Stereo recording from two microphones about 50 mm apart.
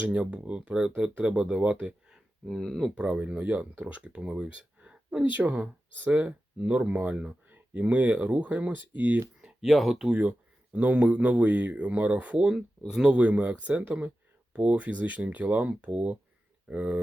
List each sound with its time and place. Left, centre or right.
0.0 s speech: right
0.7 s speech: centre
0.9 s speech: right
2.5 s speech: centre
2.9 s speech: right
5.2 s speech: right
7.5 s speech: right
9.6 s speech: centre
10.2 s speech: right
12.9 s speech: centre
13.1 s speech: right